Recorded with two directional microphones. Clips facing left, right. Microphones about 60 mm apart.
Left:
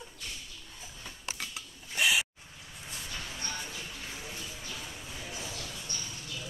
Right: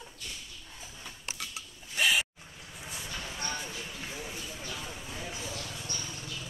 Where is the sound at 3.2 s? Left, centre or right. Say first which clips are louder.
Right 4 dB; right.